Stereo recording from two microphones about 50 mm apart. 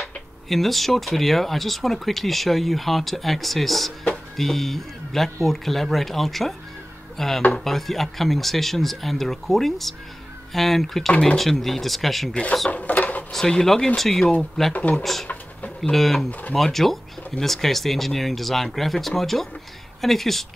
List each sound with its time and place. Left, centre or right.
0.0 s speech: centre
12.7 s a sound: left
13.3 s speech: centre
14.7 s speech: left
15.8 s speech: centre